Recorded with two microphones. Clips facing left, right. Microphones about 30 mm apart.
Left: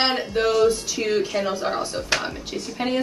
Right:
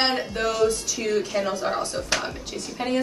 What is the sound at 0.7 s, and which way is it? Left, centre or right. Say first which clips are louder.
Speech: left 3 dB; centre.